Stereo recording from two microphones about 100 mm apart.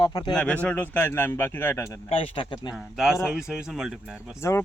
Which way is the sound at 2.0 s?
70° left (ahead or behind).